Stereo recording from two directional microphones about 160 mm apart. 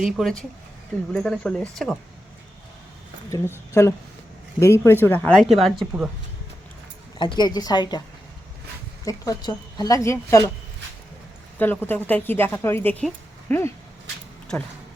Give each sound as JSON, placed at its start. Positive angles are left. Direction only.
{"t": 0.0, "sound": "speech", "side_deg": 0}
{"t": 3.2, "sound": "a woman's voice", "side_deg": 15}
{"t": 5.6, "sound": "speech", "side_deg": 0}
{"t": 7.2, "sound": "a woman's voice", "side_deg": 30}
{"t": 9.0, "sound": "a woman's voice", "side_deg": 25}
{"t": 11.6, "sound": "a woman's voice", "side_deg": 10}